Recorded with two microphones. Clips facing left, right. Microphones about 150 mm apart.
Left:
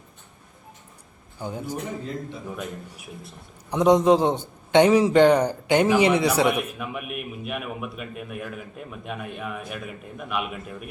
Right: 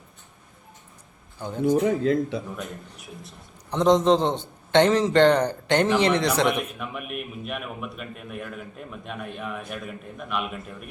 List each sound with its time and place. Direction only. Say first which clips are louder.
1.4 s a man's voice: right 1 dB; 10° left (ahead or behind)
1.6 s a man's voice: right 16 dB; 90° right
3.7 s a man's voice: left 1 dB; 10° left (ahead or behind)